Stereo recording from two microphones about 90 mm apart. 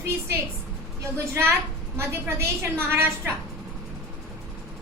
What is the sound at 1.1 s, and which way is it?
A woman's voice, 30° right (ahead or behind).